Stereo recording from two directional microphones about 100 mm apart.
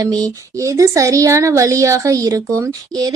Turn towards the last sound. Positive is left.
turn(degrees=-35)  # may be behind; listen again after turning